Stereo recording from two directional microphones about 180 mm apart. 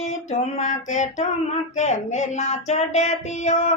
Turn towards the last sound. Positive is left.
turn(degrees=40)  # may be behind; listen again after turning